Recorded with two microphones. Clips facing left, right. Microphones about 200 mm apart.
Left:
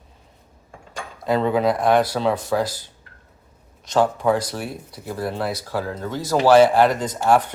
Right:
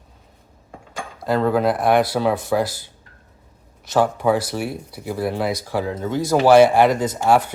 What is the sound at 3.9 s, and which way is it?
Speech, 10° right (ahead or behind).